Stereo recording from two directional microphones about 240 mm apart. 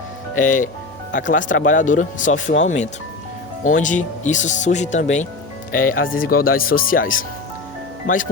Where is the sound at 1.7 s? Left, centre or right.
Left.